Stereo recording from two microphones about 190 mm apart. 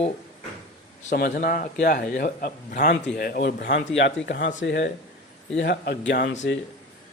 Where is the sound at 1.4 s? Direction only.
50° left (ahead or behind); by 6.3 s 70° left (ahead or behind).